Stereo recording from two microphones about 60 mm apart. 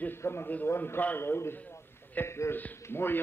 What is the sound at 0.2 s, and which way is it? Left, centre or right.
A man's voice, left.